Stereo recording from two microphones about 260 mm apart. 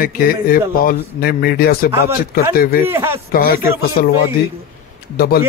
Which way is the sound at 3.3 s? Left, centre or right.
Left.